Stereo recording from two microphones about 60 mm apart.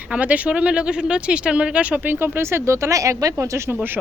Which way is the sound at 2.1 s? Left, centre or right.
Right.